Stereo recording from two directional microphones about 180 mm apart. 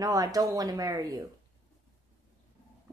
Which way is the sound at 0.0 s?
20° right (ahead or behind).